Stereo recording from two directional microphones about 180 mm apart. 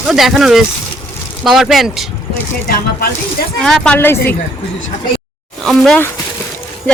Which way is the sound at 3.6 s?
5° left (ahead or behind).